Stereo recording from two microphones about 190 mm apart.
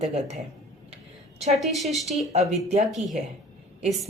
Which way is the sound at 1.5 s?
Centre (ahead or behind).